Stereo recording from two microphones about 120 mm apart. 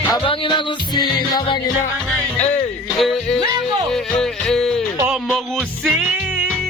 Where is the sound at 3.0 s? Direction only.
5° left (ahead or behind).